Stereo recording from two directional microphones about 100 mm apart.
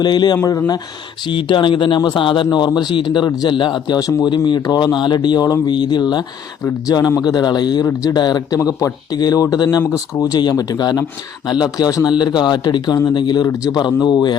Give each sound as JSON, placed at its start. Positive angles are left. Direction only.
{"t": 0.0, "sound": "speech", "side_deg": 45}
{"t": 3.2, "sound": "speech", "side_deg": 40}
{"t": 3.5, "sound": "speech", "side_deg": 55}
{"t": 9.8, "sound": "speech", "side_deg": 30}